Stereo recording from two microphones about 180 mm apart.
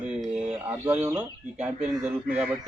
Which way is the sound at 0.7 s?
10° right (ahead or behind).